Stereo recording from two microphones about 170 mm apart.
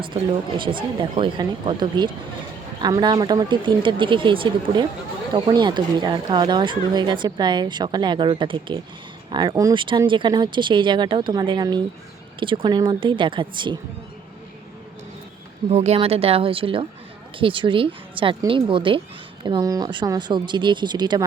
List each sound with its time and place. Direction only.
0.0 s speech: 30° right (ahead or behind)
15.7 s speech: 40° right (ahead or behind)